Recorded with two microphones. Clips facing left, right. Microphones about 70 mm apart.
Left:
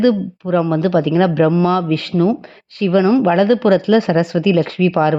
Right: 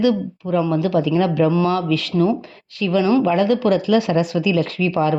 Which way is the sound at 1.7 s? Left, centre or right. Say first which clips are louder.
Left 3 dB; left.